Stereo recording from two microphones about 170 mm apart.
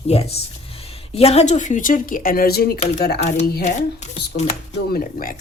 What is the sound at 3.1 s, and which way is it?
Speech, 40° left (ahead or behind).